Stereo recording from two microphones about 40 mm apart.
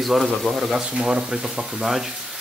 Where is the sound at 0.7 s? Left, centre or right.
Right.